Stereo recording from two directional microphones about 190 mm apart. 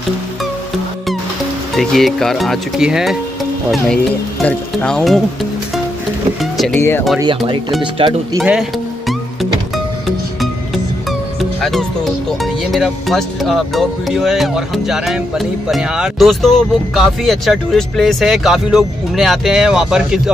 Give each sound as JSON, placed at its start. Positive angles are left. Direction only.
{"t": 1.8, "sound": "speech", "side_deg": 0}
{"t": 6.4, "sound": "speech", "side_deg": 0}
{"t": 6.8, "sound": "speech", "side_deg": 10}
{"t": 7.8, "sound": "speech", "side_deg": -25}
{"t": 8.4, "sound": "music", "side_deg": 0}
{"t": 10.0, "sound": "speech", "side_deg": 0}